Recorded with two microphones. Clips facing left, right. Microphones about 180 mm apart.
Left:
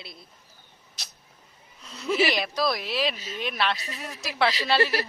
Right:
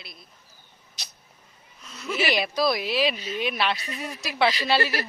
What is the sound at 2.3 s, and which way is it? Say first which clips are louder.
Speech: right 2 dB; centre (ahead or behind).